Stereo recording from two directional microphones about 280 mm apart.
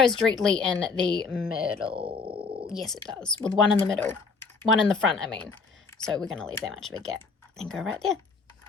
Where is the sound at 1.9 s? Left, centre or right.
Centre.